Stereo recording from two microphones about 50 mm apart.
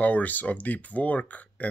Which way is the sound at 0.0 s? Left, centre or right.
Left.